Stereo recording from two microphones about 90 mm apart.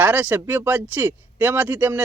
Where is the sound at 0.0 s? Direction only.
20° right (ahead or behind).